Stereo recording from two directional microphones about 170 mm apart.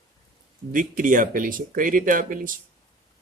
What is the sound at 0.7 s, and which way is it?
Speech, 50° right (ahead or behind).